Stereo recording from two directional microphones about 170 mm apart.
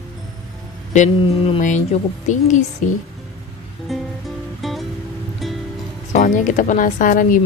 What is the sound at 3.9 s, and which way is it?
Music, centre (ahead or behind).